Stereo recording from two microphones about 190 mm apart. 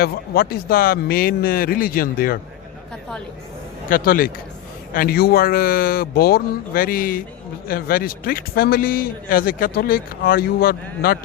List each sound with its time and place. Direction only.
0.0 s a man's voice: 55° left (ahead or behind)
3.8 s a man's voice: 45° left (ahead or behind)